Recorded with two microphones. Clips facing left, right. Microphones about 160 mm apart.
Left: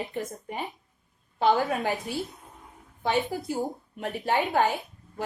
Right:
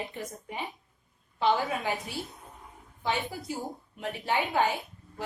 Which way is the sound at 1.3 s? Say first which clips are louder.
Left 3 dB; 50° left (ahead or behind).